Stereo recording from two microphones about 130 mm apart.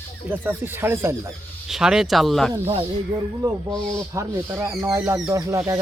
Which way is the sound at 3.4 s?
25° right (ahead or behind).